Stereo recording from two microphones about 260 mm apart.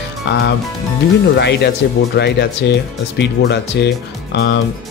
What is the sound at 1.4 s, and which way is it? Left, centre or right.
Speech, left.